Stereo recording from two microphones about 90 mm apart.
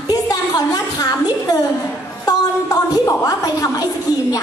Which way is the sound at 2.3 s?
40° left (ahead or behind).